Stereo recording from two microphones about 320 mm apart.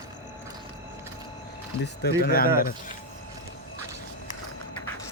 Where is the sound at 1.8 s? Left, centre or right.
Left.